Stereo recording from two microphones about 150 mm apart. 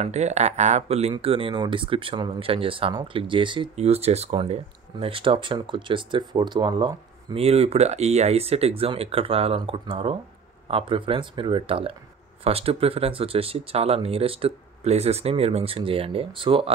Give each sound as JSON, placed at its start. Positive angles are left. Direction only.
{"t": 0.0, "sound": "speech", "side_deg": -50}
{"t": 3.7, "sound": "speech", "side_deg": -45}
{"t": 7.3, "sound": "speech", "side_deg": -45}